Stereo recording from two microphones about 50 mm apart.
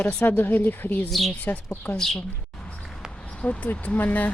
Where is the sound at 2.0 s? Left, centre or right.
Centre.